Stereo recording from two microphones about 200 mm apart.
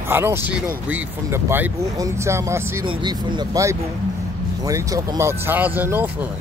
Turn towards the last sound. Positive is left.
turn(degrees=-10)  # may be behind; listen again after turning